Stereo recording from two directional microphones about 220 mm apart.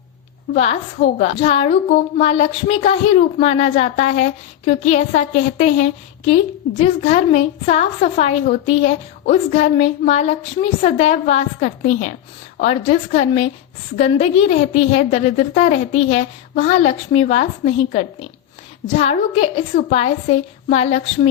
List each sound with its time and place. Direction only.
0.5 s a woman's voice: 30° left (ahead or behind)